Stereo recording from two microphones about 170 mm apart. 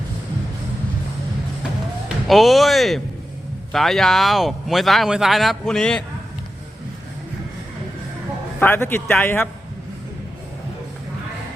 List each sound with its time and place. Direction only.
2.2 s speech: centre (ahead or behind)
8.5 s speech: 10° left (ahead or behind)